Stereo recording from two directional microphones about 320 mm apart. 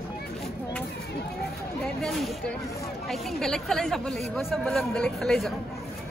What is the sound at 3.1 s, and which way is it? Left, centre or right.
Speech, centre.